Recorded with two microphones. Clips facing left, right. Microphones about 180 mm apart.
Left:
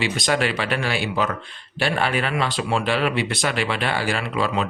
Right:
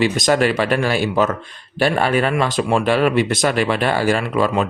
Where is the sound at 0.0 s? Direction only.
45° right (ahead or behind).